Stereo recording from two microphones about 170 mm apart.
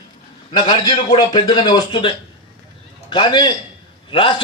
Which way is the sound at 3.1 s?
25° left (ahead or behind).